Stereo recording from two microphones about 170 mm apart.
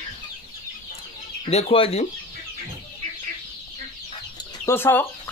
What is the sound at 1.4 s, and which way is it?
Speech, 35° left (ahead or behind).